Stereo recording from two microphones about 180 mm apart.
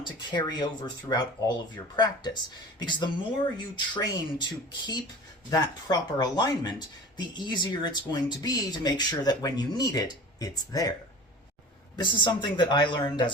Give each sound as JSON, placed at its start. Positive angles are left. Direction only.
{"t": 0.0, "sound": "speech", "side_deg": 25}
{"t": 11.9, "sound": "speech", "side_deg": 25}